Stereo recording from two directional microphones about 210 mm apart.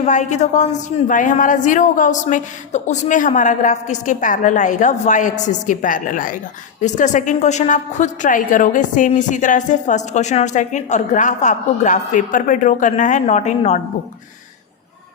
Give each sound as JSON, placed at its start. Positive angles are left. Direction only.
{"t": 0.0, "sound": "a woman's voice", "side_deg": 35}